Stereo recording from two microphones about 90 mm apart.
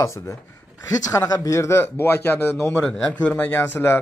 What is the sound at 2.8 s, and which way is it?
Speech, 10° left (ahead or behind).